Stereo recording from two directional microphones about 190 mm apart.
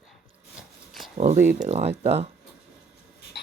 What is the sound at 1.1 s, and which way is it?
Speech, 35° right (ahead or behind).